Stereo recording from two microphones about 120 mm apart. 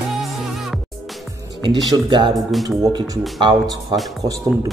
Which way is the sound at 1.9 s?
40° right (ahead or behind).